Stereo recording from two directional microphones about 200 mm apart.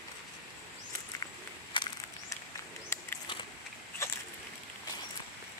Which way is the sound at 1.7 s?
25° left (ahead or behind).